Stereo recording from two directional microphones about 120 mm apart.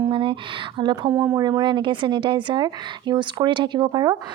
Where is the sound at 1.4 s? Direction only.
35° right (ahead or behind).